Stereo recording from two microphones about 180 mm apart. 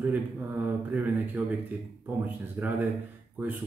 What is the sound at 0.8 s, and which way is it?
Speech, 10° right (ahead or behind).